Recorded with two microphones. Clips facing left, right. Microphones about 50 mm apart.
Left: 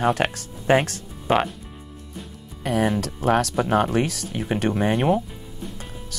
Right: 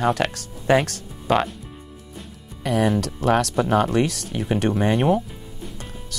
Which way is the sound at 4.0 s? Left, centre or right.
Right.